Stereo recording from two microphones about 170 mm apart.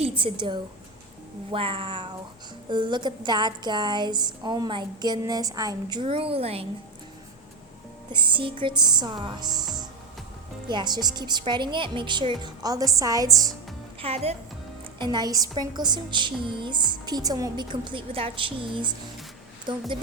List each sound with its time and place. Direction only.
0.2 s a woman's voice: 30° right (ahead or behind)
8.1 s a woman's voice: 30° right (ahead or behind)
14.0 s speech: 35° right (ahead or behind)
14.9 s a woman's voice: 25° right (ahead or behind)